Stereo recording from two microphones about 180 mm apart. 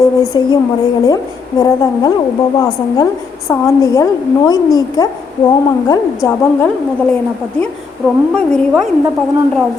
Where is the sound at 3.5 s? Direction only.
20° left (ahead or behind).